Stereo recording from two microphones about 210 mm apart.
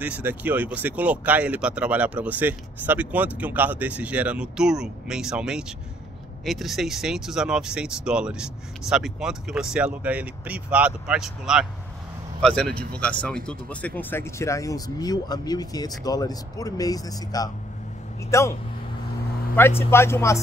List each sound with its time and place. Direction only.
0.0 s speech: 5° right (ahead or behind); by 18.5 s 15° left (ahead or behind)
19.8 s speech: 10° left (ahead or behind)